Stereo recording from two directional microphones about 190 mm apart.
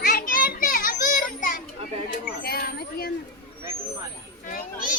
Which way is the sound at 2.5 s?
55° left (ahead or behind).